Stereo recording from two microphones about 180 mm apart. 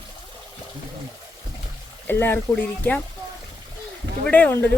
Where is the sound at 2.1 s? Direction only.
10° left (ahead or behind).